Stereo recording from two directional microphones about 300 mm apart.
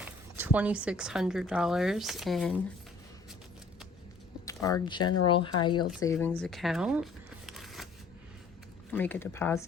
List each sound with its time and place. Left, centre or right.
0.0 s speech: centre
4.4 s speech: centre
6.4 s shuffling cards: centre
8.9 s speech: centre